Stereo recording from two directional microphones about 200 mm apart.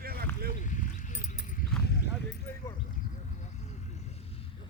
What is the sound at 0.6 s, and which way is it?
Clip-clop, 40° left (ahead or behind).